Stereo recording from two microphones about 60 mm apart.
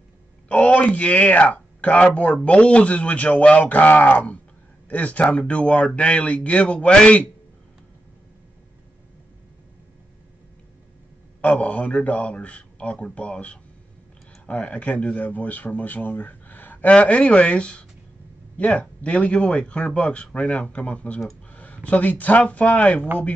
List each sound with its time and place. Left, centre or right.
0.5 s speech: left
11.4 s speech: left